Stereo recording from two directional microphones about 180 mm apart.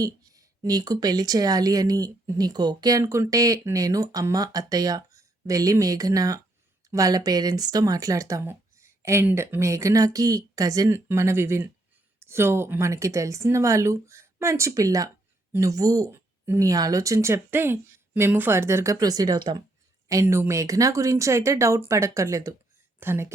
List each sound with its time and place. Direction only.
0.0 s speech: 20° right (ahead or behind)